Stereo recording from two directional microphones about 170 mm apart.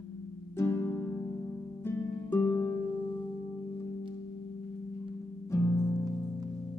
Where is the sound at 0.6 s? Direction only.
15° left (ahead or behind).